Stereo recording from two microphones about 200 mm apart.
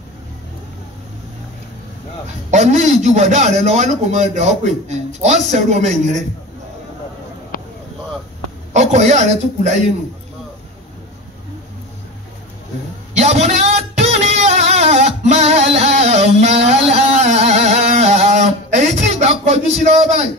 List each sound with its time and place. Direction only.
2.5 s a man's voice: 35° right (ahead or behind)
7.5 s a sound: 45° left (ahead or behind)
8.7 s a man's voice: 35° right (ahead or behind)
13.1 s music: 35° right (ahead or behind)